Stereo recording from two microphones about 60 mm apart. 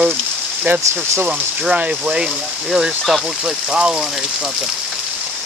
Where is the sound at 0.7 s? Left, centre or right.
Right.